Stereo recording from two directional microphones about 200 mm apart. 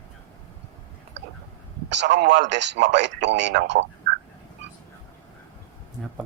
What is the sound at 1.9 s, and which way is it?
A man's voice, 60° right (ahead or behind).